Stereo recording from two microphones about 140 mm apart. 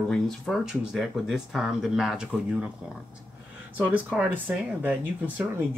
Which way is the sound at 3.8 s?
10° right (ahead or behind).